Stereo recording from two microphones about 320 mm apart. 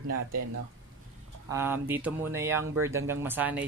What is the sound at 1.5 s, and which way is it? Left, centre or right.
Speech, centre.